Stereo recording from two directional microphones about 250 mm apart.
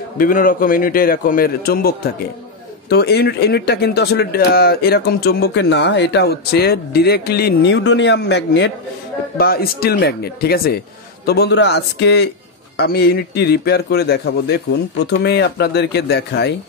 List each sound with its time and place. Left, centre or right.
0.2 s a man's voice: left